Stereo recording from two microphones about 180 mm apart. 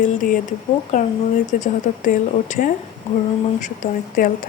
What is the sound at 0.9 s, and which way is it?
A woman's voice, 40° left (ahead or behind).